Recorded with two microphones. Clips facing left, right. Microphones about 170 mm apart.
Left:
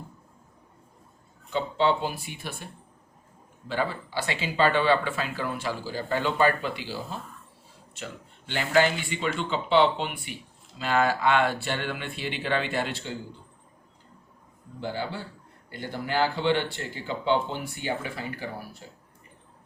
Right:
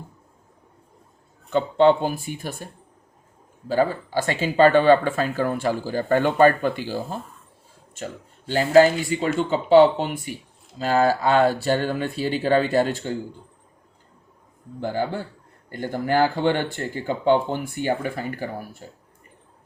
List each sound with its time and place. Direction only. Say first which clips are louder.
1.5 s speech: right 8 dB; 50° right (ahead or behind)
3.7 s speech: right 8 dB; 45° right (ahead or behind)
14.8 s speech: right 6 dB; 50° right (ahead or behind)